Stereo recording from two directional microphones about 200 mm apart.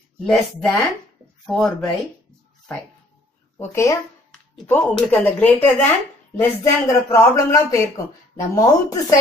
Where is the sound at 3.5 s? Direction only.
15° left (ahead or behind).